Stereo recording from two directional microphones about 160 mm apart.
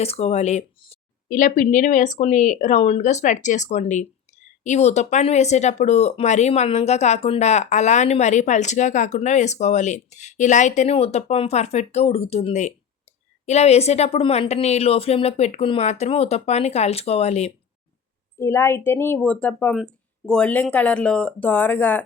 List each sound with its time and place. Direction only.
0.0 s speech: 40° left (ahead or behind)
1.3 s speech: 55° left (ahead or behind)
18.3 s speech: 15° left (ahead or behind)